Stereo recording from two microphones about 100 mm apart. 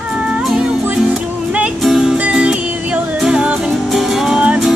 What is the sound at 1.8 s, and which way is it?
Music, 5° right (ahead or behind).